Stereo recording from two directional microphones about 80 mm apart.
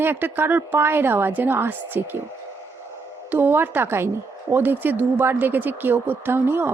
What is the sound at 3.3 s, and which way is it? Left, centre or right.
Speech, right.